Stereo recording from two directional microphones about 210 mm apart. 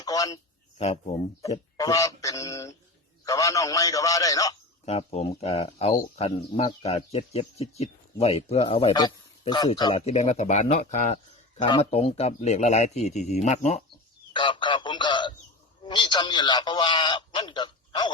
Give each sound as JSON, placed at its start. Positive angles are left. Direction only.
{"t": 0.0, "sound": "a sound", "side_deg": 15}
{"t": 0.8, "sound": "a man's voice", "side_deg": 30}
{"t": 1.7, "sound": "a man's voice", "side_deg": 15}
{"t": 4.9, "sound": "speech", "side_deg": 30}
{"t": 11.6, "sound": "a man's voice", "side_deg": 25}
{"t": 14.3, "sound": "a man's voice", "side_deg": 25}